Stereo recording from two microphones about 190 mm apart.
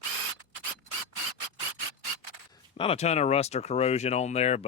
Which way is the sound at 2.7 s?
30° left (ahead or behind).